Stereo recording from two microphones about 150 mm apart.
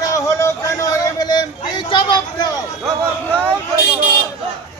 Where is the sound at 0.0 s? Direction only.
20° left (ahead or behind).